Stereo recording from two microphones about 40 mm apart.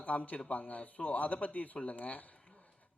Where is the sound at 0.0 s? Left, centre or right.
Left.